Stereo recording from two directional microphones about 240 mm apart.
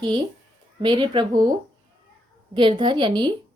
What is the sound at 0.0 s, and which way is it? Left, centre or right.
A woman's voice, centre.